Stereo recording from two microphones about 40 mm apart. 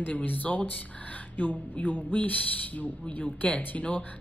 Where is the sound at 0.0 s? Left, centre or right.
Left.